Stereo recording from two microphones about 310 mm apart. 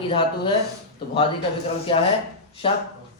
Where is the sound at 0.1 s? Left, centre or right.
Centre.